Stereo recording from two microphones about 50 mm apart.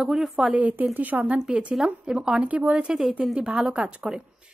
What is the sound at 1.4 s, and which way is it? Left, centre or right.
Speech, right.